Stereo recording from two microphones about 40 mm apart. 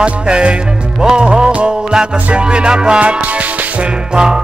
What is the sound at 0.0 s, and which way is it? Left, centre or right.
Music, right.